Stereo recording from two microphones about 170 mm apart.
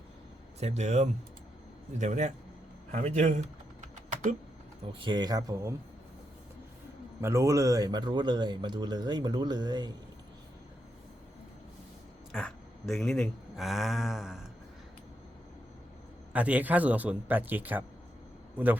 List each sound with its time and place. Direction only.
0.6 s a man's voice: 40° right (ahead or behind)
3.2 s typing: 45° right (ahead or behind)
4.9 s speech: 30° right (ahead or behind)
7.2 s speech: 15° right (ahead or behind)
12.3 s speech: 5° left (ahead or behind)
16.3 s a man's voice: 10° right (ahead or behind)